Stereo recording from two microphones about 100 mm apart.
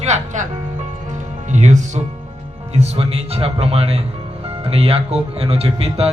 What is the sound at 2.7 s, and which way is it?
Speech, 90° right.